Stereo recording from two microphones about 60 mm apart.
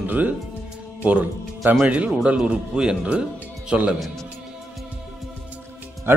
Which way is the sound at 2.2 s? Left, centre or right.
Centre.